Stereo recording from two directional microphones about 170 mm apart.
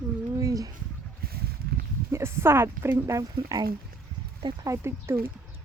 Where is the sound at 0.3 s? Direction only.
20° right (ahead or behind).